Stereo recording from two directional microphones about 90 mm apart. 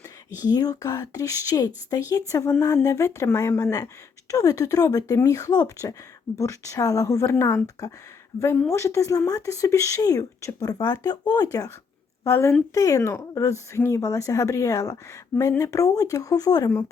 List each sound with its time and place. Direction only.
0.4 s speech: 45° left (ahead or behind)
8.7 s speech: 35° left (ahead or behind)
12.2 s a woman's voice: 30° left (ahead or behind)